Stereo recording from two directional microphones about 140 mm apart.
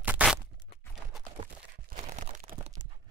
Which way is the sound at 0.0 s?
10° right (ahead or behind).